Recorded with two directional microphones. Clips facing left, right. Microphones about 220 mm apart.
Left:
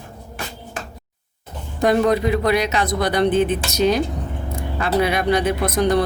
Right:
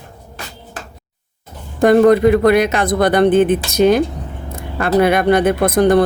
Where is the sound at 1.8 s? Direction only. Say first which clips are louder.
Right 7 dB; 55° right (ahead or behind).